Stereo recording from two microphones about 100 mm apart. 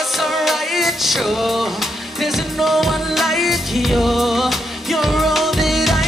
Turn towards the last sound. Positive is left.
turn(degrees=0)  # may be behind; listen again after turning